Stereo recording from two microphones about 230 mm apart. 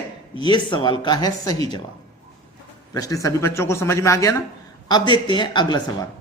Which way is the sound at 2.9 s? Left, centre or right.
Centre.